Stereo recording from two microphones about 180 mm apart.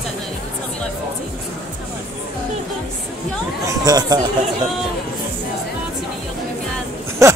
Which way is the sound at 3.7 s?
20° right (ahead or behind).